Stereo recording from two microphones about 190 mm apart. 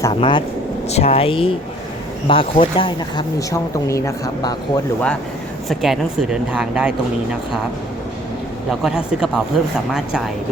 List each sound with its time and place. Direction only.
0.0 s speech: 25° left (ahead or behind)
5.6 s speech: centre (ahead or behind)
8.8 s speech: 5° right (ahead or behind)